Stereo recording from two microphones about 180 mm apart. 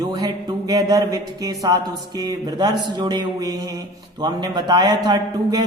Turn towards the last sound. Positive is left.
turn(degrees=-20)  # may be behind; listen again after turning